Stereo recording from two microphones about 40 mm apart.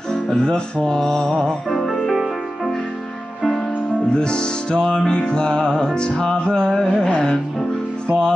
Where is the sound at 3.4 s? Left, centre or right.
Centre.